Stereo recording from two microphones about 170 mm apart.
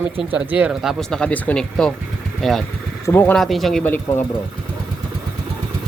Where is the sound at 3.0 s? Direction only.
10° left (ahead or behind).